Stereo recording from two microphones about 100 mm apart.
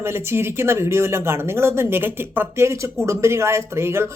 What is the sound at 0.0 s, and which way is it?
Speech, 25° right (ahead or behind).